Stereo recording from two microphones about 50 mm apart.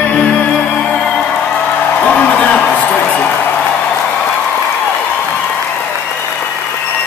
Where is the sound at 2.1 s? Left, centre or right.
Left.